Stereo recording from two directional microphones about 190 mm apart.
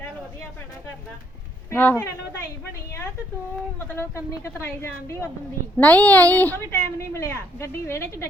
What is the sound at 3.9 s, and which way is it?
A woman's voice, 15° left (ahead or behind).